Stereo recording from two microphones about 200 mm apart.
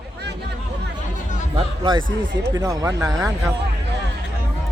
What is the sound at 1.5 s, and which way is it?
Speech, 25° right (ahead or behind).